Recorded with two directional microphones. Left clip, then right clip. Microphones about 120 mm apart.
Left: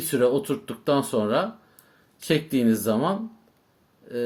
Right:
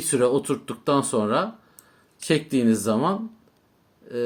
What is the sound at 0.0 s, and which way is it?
Speech, 30° right (ahead or behind).